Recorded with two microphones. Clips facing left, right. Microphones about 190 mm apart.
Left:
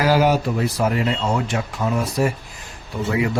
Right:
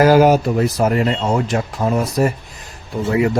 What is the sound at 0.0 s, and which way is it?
Speech, 45° right (ahead or behind).